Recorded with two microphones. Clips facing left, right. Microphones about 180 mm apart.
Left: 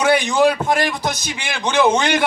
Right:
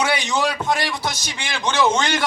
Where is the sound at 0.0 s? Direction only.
50° left (ahead or behind).